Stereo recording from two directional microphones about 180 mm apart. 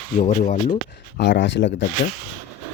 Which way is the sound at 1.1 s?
80° left.